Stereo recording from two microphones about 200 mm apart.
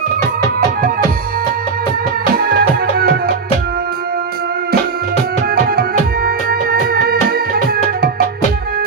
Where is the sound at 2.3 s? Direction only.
45° right (ahead or behind).